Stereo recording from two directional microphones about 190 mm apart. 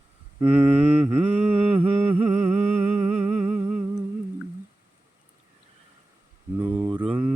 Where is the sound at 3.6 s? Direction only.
10° right (ahead or behind).